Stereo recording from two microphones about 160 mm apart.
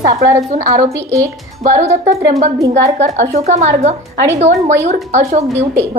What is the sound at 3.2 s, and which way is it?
A woman's voice, 45° right (ahead or behind).